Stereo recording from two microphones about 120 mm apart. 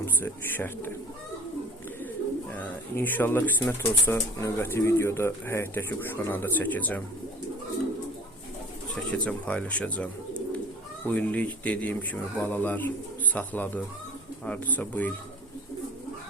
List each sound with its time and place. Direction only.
0.0 s speech: 15° left (ahead or behind)
2.6 s speech: 15° left (ahead or behind)
9.1 s speech: 10° left (ahead or behind)